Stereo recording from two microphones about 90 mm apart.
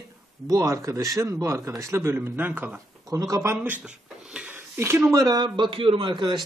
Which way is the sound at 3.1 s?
40° right (ahead or behind).